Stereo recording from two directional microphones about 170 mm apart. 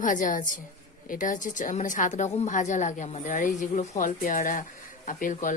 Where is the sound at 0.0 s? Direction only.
50° left (ahead or behind).